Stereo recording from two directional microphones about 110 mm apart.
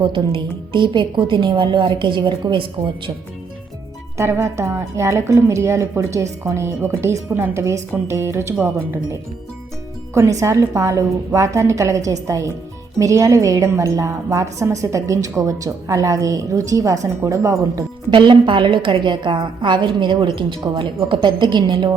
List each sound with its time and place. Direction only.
0.3 s a woman's voice: 50° right (ahead or behind)
4.2 s a woman's voice: 25° right (ahead or behind)
10.4 s a woman's voice: 25° right (ahead or behind)
18.1 s a woman's voice: 45° right (ahead or behind)